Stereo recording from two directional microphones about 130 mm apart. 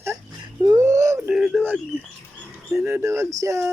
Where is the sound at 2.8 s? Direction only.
15° right (ahead or behind).